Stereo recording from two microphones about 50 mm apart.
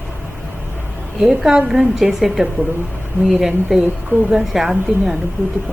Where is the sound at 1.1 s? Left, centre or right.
Centre.